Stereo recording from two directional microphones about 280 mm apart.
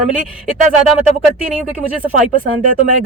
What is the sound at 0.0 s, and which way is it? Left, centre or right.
Speech, right.